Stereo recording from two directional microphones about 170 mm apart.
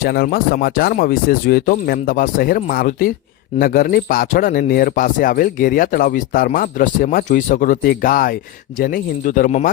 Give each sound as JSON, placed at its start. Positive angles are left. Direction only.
{"t": 0.0, "sound": "speech", "side_deg": 60}